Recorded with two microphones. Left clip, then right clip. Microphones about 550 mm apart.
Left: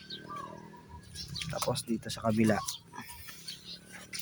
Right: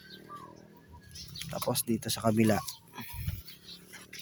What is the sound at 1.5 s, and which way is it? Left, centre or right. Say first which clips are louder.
Speech: right 2 dB; right.